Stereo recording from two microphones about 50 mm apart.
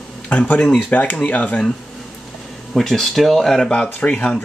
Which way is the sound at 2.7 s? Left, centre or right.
Centre.